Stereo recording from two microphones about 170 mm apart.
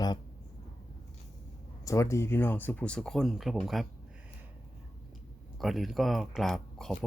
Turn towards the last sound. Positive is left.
turn(degrees=0)  # may be behind; listen again after turning